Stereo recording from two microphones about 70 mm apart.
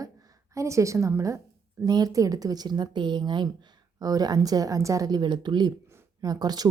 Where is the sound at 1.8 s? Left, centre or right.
Right.